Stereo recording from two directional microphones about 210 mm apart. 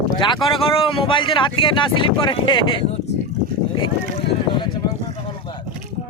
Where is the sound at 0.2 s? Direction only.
20° left (ahead or behind).